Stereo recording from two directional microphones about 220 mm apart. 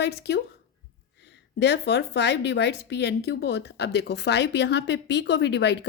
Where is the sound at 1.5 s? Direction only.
50° left (ahead or behind).